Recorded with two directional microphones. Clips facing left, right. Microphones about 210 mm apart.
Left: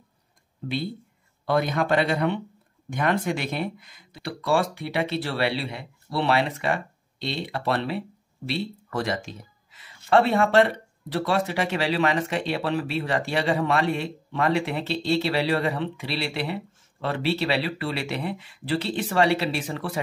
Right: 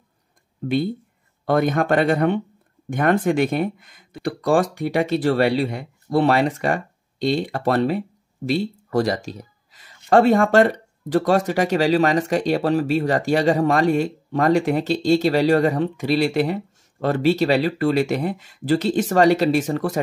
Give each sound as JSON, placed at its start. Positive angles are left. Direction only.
{"t": 1.4, "sound": "speech", "side_deg": -50}